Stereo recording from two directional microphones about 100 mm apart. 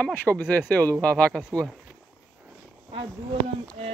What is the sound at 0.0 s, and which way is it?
Speech, 15° left (ahead or behind).